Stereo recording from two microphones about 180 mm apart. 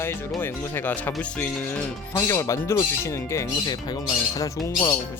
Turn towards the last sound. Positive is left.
turn(degrees=20)  # may be behind; listen again after turning